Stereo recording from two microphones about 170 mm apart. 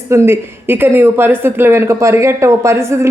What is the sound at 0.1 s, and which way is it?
Speech, 15° right (ahead or behind).